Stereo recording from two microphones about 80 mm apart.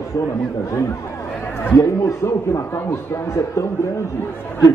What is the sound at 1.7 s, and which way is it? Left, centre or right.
A man's voice, left.